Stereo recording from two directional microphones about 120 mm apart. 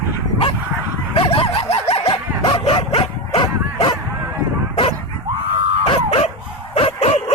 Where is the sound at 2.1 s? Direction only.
45° left (ahead or behind).